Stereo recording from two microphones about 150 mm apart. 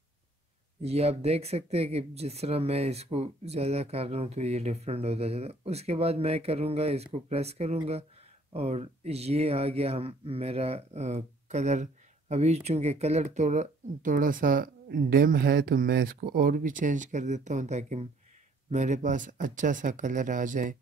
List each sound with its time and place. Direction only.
0.8 s speech: 45° right (ahead or behind); by 20.7 s 60° right (ahead or behind)